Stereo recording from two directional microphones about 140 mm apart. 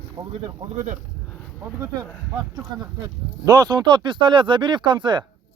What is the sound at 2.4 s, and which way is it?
Speech, 30° right (ahead or behind).